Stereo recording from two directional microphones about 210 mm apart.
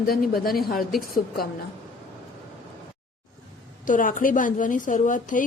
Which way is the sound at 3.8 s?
40° left (ahead or behind).